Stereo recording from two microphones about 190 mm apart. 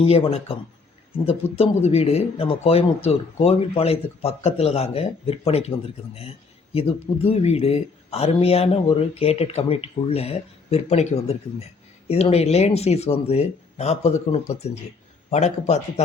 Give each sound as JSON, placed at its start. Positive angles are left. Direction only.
{"t": 0.0, "sound": "speech", "side_deg": 30}